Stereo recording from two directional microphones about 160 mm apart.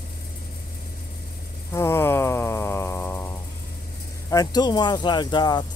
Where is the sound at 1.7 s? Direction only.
15° left (ahead or behind).